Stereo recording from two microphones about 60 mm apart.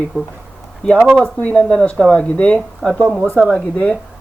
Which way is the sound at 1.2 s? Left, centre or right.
Left.